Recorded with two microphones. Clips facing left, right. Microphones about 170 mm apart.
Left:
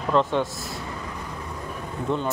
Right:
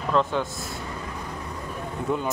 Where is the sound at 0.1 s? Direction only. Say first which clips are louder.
Left 2 dB; centre (ahead or behind).